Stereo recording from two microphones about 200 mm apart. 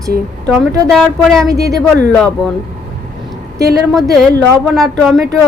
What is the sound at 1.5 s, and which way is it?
Speech, 15° right (ahead or behind).